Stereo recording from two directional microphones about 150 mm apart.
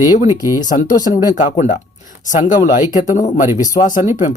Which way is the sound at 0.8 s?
60° left (ahead or behind).